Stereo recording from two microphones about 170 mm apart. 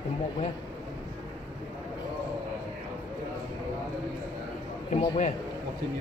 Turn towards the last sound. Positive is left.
turn(degrees=40)  # may be behind; listen again after turning